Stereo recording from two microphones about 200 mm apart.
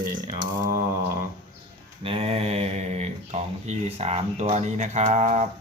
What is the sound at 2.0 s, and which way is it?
Mantra, 30° right (ahead or behind).